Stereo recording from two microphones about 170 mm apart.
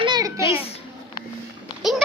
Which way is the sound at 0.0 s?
25° right (ahead or behind).